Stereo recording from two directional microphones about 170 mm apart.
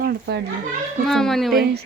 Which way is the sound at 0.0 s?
70° right (ahead or behind).